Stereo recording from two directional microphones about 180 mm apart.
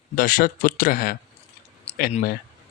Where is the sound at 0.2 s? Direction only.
50° left (ahead or behind).